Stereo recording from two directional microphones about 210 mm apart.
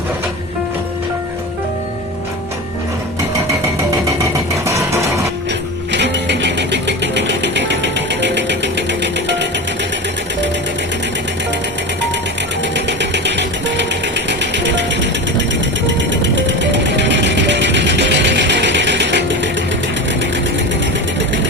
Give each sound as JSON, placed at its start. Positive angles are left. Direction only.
{"t": 4.2, "sound": "vehicle", "side_deg": -15}
{"t": 5.9, "sound": "sewing machine", "side_deg": -55}
{"t": 12.7, "sound": "a sound", "side_deg": -55}
{"t": 14.3, "sound": "music", "side_deg": -55}
{"t": 16.2, "sound": "music", "side_deg": -60}